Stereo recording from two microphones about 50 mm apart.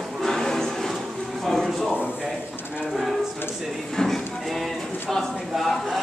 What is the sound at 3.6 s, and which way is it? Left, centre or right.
Speech, centre.